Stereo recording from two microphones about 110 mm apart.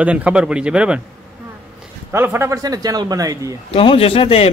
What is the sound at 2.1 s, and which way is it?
Speech, 20° right (ahead or behind).